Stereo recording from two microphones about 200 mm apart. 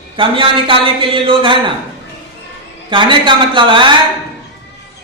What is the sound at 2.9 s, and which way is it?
Speech, 25° right (ahead or behind).